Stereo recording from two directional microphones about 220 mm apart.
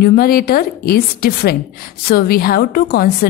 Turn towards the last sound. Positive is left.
turn(degrees=45)  # may be behind; listen again after turning